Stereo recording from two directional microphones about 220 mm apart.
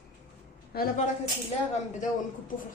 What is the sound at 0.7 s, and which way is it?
Speech, 45° left (ahead or behind).